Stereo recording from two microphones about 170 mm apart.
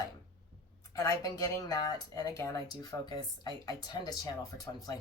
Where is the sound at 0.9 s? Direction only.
20° left (ahead or behind).